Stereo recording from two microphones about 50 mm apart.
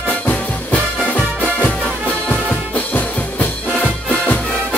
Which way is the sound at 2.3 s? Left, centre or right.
Left.